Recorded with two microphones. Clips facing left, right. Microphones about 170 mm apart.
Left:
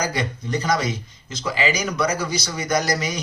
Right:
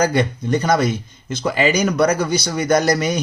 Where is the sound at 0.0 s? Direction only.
55° right (ahead or behind).